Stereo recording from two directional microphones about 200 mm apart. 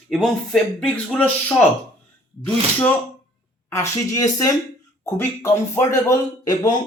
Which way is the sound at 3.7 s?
15° left (ahead or behind).